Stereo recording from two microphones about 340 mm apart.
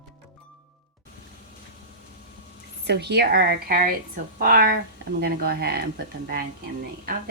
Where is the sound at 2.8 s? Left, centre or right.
Right.